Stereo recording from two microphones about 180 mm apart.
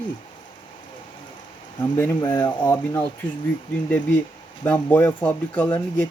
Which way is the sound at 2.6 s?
10° left (ahead or behind).